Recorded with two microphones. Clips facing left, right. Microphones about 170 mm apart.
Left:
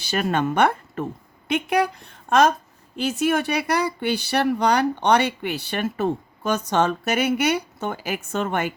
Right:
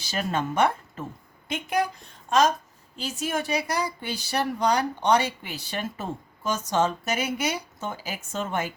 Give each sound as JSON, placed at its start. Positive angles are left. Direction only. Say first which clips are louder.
{"t": 0.0, "sound": "speech", "louder": "left 5 dB", "side_deg": 65}